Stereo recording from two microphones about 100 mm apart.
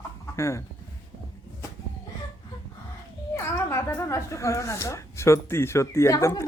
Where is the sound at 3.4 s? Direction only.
30° left (ahead or behind).